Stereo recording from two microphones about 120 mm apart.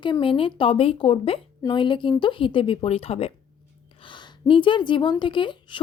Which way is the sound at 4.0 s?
40° left (ahead or behind).